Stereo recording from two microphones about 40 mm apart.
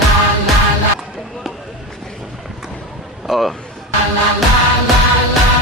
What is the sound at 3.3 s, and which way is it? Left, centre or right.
Speech, centre.